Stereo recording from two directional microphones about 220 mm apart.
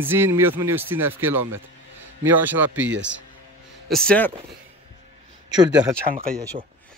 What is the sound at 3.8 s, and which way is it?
Speech, 5° left (ahead or behind).